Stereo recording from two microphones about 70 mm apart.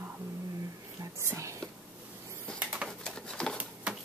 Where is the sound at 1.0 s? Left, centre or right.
Right.